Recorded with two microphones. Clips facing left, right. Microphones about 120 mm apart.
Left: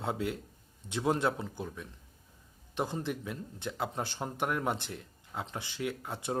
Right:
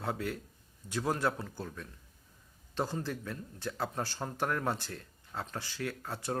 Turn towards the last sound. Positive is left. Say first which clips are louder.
# left 2 dB
turn(degrees=20)  # may be behind; listen again after turning